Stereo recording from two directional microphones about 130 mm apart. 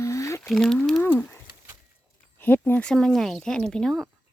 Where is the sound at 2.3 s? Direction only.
15° left (ahead or behind).